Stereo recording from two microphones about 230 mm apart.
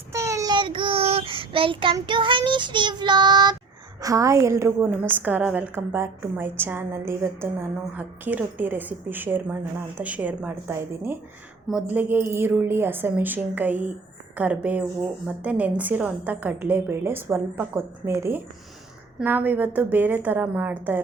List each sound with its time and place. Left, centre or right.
0.1 s child singing: centre
4.0 s a woman's voice: centre